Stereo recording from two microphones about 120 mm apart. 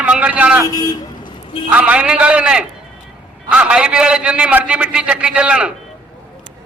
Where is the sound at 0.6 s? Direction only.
30° left (ahead or behind).